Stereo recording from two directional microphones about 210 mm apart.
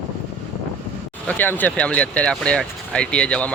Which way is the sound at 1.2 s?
10° left (ahead or behind).